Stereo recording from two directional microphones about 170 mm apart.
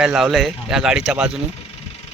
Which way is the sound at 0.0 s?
5° right (ahead or behind).